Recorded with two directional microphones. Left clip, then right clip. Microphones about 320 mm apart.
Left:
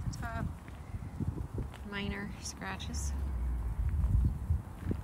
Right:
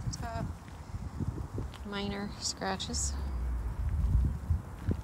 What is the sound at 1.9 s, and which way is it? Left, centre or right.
Speech, centre.